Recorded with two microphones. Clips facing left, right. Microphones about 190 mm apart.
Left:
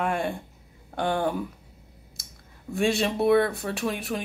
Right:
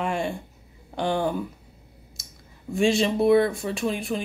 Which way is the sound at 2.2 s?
60° left (ahead or behind).